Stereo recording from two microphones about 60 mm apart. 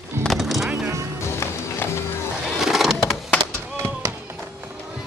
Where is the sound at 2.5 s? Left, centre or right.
Centre.